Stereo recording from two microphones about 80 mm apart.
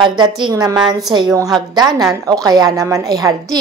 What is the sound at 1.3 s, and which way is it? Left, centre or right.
Speech, right.